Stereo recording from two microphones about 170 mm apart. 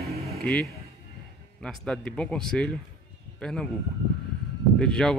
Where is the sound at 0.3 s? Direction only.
5° left (ahead or behind).